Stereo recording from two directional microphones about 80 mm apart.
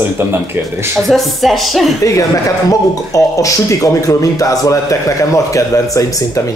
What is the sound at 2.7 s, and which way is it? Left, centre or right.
A man's voice, left.